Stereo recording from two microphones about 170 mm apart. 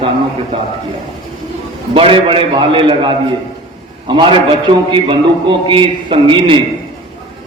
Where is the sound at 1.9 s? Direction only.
30° right (ahead or behind).